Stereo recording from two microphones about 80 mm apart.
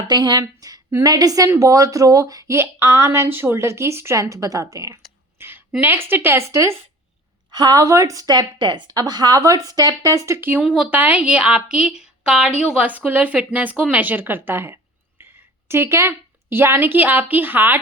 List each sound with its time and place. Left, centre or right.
0.1 s a woman's voice: right
5.4 s a sound: right
5.8 s a woman's voice: right
7.5 s a woman's voice: right
8.9 s a woman's voice: right
9.4 s speech: right
10.8 s a woman's voice: right